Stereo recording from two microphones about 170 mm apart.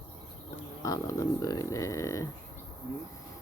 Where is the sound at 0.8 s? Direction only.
20° left (ahead or behind).